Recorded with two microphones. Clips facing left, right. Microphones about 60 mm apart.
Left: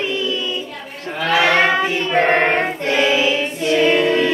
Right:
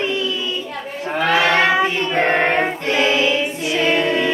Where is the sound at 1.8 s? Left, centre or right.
Centre.